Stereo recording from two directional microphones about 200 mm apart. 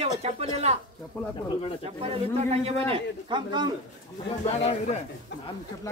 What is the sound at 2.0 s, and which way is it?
A man's voice, 30° right (ahead or behind).